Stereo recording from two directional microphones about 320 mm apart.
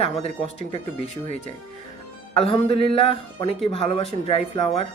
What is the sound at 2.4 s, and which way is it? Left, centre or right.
Speech, centre.